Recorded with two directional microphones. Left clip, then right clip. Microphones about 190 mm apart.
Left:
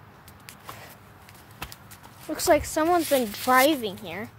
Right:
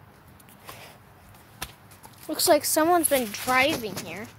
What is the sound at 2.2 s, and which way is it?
Speech, 5° right (ahead or behind).